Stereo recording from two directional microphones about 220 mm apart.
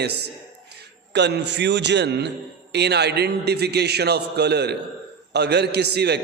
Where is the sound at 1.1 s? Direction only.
50° right (ahead or behind).